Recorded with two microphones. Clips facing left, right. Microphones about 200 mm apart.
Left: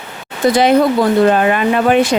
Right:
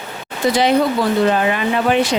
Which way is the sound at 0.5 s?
50° left (ahead or behind).